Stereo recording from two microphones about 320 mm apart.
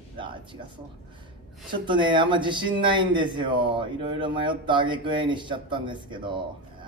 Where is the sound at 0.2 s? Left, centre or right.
Centre.